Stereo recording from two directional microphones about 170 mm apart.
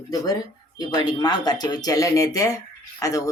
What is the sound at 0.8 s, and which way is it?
Speech, 25° left (ahead or behind).